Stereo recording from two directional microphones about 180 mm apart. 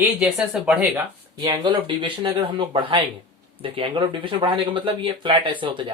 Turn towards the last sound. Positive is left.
turn(degrees=-25)  # may be behind; listen again after turning